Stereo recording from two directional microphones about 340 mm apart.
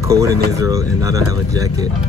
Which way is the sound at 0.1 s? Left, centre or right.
Centre.